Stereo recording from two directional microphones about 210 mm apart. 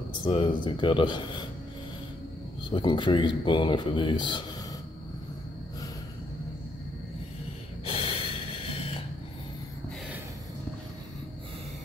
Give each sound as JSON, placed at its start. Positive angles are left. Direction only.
{"t": 0.1, "sound": "speech", "side_deg": 25}
{"t": 2.7, "sound": "speech", "side_deg": 20}
{"t": 7.8, "sound": "snort", "side_deg": 25}